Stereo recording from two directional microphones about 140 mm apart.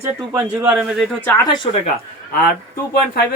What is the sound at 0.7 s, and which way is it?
Speech, 5° right (ahead or behind).